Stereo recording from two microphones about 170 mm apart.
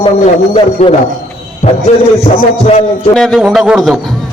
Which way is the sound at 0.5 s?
35° left (ahead or behind).